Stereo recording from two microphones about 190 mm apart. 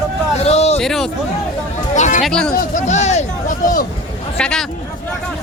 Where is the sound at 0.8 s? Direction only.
Centre (ahead or behind).